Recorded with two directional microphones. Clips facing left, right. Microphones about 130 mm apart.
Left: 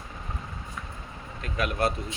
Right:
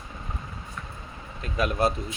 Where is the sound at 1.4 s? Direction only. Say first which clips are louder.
Right 3 dB; 35° right (ahead or behind).